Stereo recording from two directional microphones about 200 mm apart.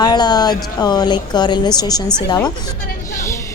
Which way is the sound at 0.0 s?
20° left (ahead or behind).